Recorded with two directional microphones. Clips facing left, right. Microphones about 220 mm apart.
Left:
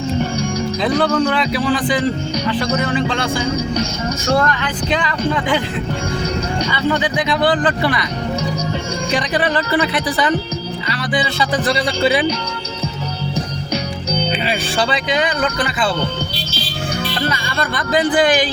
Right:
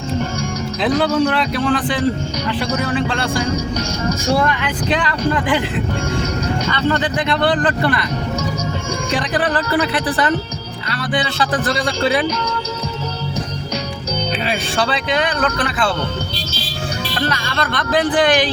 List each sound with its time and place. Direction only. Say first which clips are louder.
0.8 s speech: right 1 dB; centre (ahead or behind)
4.3 s speech: left 1 dB; 5° right (ahead or behind)
6.7 s speech: even; 5° left (ahead or behind)
9.1 s speech: left 1 dB; centre (ahead or behind)
14.4 s speech: left 1 dB; centre (ahead or behind)
17.2 s speech: right 3 dB; 5° left (ahead or behind)